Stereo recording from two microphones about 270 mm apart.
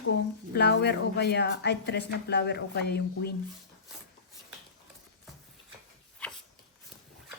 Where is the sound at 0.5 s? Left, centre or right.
Left.